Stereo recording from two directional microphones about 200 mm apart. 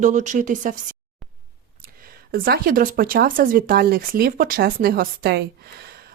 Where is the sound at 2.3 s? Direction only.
50° right (ahead or behind).